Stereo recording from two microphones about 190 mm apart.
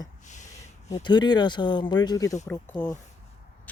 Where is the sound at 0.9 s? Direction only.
25° left (ahead or behind).